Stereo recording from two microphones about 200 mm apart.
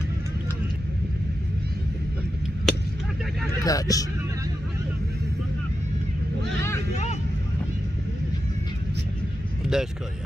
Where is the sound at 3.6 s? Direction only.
15° left (ahead or behind).